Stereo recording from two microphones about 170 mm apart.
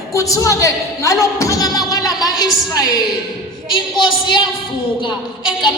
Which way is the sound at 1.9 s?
20° left (ahead or behind).